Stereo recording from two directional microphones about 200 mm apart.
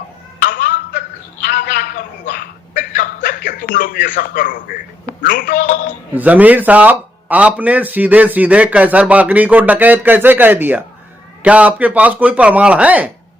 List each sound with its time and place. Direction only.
0.4 s a sound: 45° left (ahead or behind)
5.0 s speech: 45° left (ahead or behind)
6.1 s speech: 10° right (ahead or behind)